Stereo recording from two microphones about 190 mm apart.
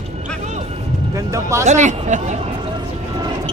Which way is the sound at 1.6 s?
40° right (ahead or behind).